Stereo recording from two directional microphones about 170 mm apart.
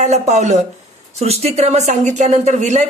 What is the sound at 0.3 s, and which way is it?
A man's voice, 40° right (ahead or behind).